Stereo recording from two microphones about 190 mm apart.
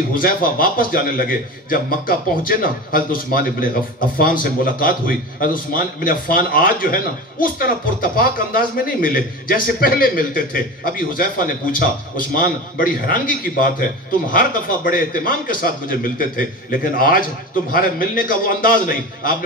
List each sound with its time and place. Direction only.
0.1 s a man's voice: 50° left (ahead or behind)